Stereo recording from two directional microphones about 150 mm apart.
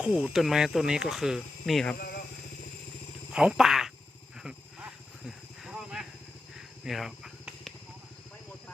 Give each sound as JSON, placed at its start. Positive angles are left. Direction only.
{"t": 0.0, "sound": "speech", "side_deg": -5}
{"t": 2.0, "sound": "a sound", "side_deg": 90}
{"t": 3.3, "sound": "a sound", "side_deg": -5}
{"t": 4.4, "sound": "wild animals", "side_deg": -5}
{"t": 5.6, "sound": "vehicle", "side_deg": -5}
{"t": 6.8, "sound": "cricket", "side_deg": 0}